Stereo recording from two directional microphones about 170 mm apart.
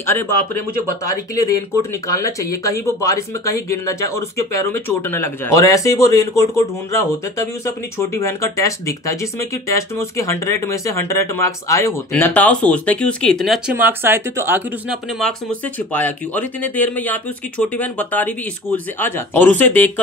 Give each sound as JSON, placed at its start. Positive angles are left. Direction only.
{"t": 0.0, "sound": "speech", "side_deg": 15}
{"t": 13.7, "sound": "speech", "side_deg": -10}
{"t": 15.1, "sound": "speech", "side_deg": 5}